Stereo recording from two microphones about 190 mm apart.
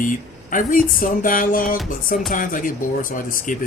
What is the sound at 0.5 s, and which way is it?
Speech, 45° left (ahead or behind).